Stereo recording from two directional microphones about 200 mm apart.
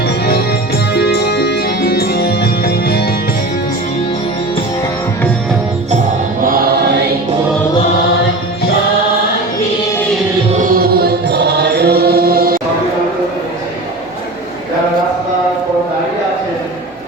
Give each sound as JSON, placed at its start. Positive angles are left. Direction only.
{"t": 0.0, "sound": "music", "side_deg": 50}
{"t": 6.4, "sound": "music", "side_deg": -45}
{"t": 10.5, "sound": "music", "side_deg": -40}